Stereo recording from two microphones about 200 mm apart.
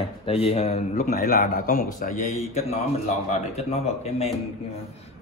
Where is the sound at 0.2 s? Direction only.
30° left (ahead or behind).